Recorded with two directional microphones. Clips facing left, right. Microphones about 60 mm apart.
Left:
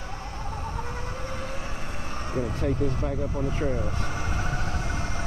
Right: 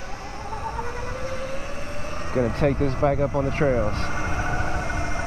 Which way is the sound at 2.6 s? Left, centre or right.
Right.